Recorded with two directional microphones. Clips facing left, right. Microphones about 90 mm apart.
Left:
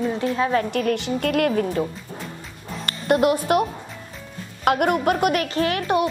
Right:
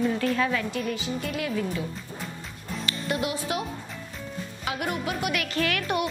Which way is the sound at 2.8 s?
50° left (ahead or behind).